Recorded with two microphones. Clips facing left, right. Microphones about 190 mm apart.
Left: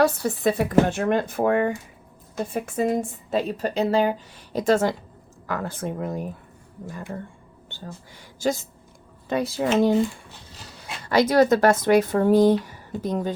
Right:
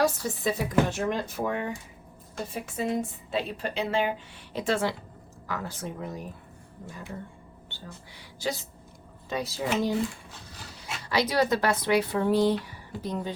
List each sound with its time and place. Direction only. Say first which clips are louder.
0.0 s speech: left 6 dB; 60° left (ahead or behind)
8.4 s speech: left 7 dB; 45° left (ahead or behind)
11.0 s speech: left 7 dB; 50° left (ahead or behind)